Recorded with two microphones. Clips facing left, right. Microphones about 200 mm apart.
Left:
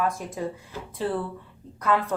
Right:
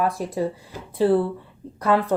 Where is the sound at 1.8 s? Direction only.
35° right (ahead or behind).